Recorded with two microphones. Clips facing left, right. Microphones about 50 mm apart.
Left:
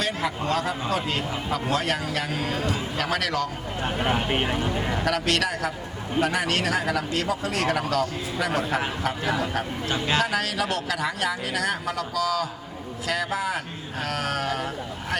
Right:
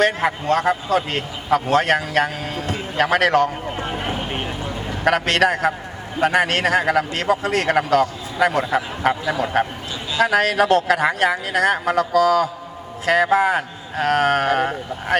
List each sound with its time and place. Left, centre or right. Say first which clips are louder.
0.0 s a man's voice: right 8 dB; right
4.3 s speech: left 2 dB; left
5.0 s a man's voice: right 10 dB; right